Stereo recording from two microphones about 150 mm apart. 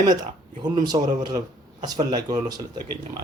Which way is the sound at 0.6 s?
30° right (ahead or behind).